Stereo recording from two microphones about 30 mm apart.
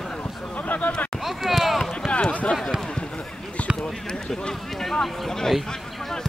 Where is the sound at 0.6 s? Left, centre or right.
Left.